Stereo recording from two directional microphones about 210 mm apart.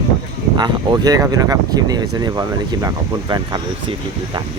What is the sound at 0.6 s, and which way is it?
Speech, 20° right (ahead or behind).